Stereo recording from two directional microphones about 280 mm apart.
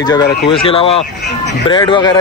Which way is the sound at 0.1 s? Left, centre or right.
Centre.